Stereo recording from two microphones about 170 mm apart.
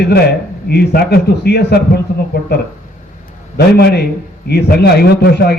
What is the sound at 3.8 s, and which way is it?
A man's voice, 70° left (ahead or behind).